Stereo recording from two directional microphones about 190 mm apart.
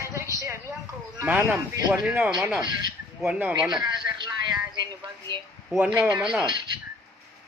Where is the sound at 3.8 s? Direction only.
20° right (ahead or behind).